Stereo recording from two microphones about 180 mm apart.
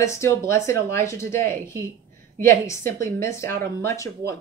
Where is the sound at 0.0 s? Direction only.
15° left (ahead or behind).